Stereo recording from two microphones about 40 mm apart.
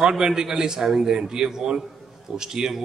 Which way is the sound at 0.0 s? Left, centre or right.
Centre.